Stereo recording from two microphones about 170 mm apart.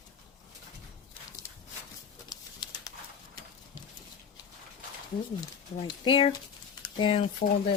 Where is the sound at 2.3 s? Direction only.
20° left (ahead or behind).